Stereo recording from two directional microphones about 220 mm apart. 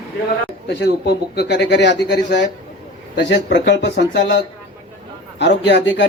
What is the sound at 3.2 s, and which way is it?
A man's voice, 55° left (ahead or behind).